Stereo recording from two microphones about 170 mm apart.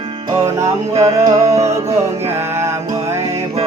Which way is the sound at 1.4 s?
40° right (ahead or behind).